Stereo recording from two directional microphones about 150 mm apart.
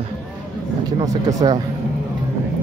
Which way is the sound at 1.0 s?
25° right (ahead or behind).